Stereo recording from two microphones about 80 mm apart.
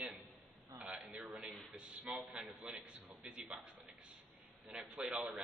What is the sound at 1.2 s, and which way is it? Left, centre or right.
A man's voice, centre.